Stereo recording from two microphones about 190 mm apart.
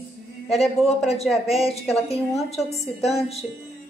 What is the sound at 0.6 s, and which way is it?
A woman's voice, centre (ahead or behind).